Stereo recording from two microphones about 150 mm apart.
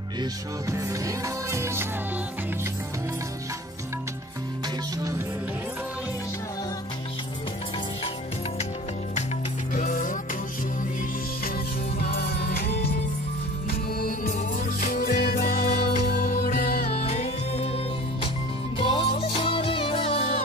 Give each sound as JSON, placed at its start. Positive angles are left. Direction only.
{"t": 0.2, "sound": "music", "side_deg": -20}
{"t": 9.8, "sound": "music", "side_deg": 60}
{"t": 12.0, "sound": "music", "side_deg": 90}
{"t": 13.7, "sound": "music", "side_deg": 75}
{"t": 16.3, "sound": "music", "side_deg": 50}
{"t": 16.9, "sound": "music", "side_deg": 45}
{"t": 18.8, "sound": "music", "side_deg": 35}